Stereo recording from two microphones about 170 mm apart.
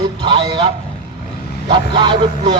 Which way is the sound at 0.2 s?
30° right (ahead or behind).